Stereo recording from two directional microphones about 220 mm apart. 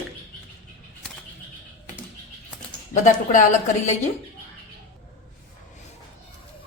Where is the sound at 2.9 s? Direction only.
35° left (ahead or behind).